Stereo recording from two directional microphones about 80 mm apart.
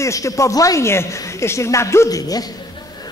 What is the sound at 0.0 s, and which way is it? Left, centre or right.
Speech, left.